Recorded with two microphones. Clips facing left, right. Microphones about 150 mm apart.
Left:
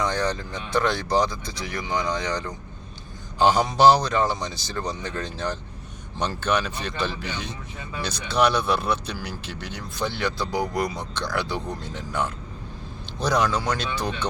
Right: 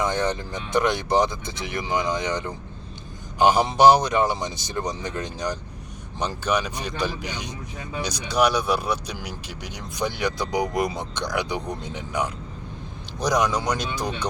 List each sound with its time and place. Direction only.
0.0 s speech: 20° right (ahead or behind)